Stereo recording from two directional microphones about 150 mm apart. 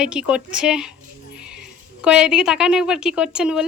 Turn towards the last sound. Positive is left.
turn(degrees=-5)  # may be behind; listen again after turning